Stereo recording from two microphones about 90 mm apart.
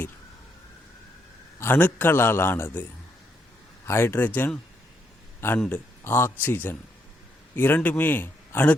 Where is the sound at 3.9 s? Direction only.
25° left (ahead or behind).